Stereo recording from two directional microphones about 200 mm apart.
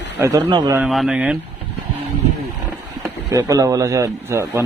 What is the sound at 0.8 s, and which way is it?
Speech, centre (ahead or behind).